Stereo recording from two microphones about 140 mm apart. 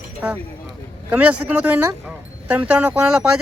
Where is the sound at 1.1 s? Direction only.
10° right (ahead or behind).